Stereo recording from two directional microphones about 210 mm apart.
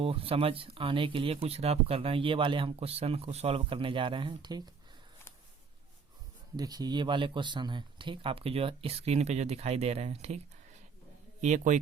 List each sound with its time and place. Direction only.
0.0 s speech: 25° right (ahead or behind)
6.6 s a man's voice: 20° right (ahead or behind); by 11.8 s 35° right (ahead or behind)